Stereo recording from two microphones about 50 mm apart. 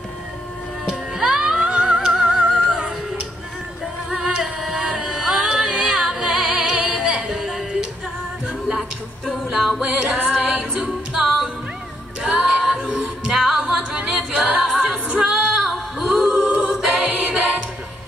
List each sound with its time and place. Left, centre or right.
0.8 s music: centre
4.1 s music: centre
7.2 s music: centre
10.5 s a capella: right
14.6 s a capella: centre
15.0 s music: right; by 16.2 s centre
16.2 s a capella: centre
16.6 s music: centre